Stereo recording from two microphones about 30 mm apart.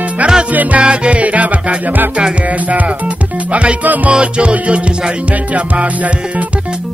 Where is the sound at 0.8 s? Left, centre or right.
Right.